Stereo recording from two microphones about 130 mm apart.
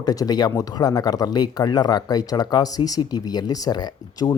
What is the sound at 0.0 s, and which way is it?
Speech, 30° left (ahead or behind).